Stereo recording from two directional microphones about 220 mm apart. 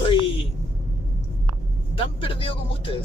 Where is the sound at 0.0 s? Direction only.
25° left (ahead or behind).